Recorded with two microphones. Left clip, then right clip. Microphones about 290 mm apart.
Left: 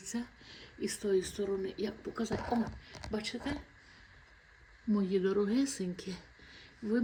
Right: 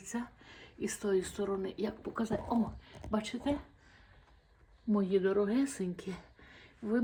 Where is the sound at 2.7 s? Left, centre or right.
Centre.